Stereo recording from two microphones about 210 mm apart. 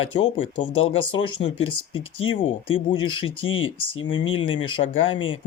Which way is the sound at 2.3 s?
25° left (ahead or behind).